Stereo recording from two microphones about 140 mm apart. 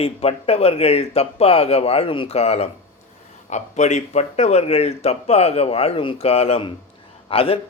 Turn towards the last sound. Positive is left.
turn(degrees=40)  # may be behind; listen again after turning